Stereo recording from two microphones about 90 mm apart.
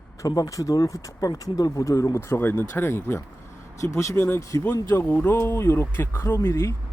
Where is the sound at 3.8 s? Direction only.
35° left (ahead or behind).